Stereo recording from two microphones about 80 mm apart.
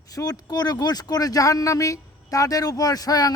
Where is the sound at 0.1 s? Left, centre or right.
Left.